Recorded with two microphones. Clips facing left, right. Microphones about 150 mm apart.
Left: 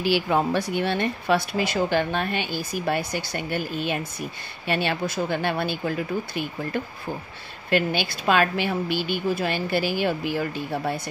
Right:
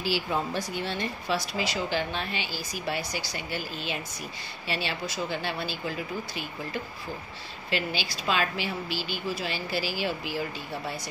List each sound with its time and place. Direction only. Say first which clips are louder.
0.0 s speech: left 7 dB; 65° left (ahead or behind)